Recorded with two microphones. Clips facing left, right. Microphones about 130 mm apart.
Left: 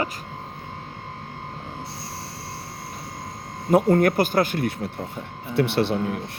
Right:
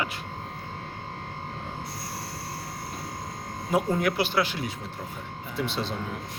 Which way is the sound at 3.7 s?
55° left (ahead or behind).